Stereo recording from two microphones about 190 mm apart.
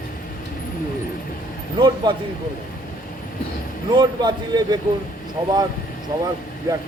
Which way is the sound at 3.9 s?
20° right (ahead or behind).